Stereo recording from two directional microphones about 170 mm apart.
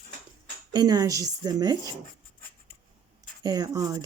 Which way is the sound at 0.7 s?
25° right (ahead or behind).